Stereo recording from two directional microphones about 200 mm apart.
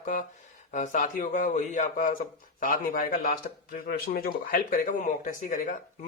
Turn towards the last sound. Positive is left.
turn(degrees=40)  # may be behind; listen again after turning